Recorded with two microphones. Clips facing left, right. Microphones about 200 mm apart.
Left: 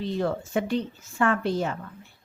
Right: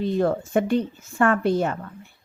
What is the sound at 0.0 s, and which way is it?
A woman's voice, 50° right (ahead or behind).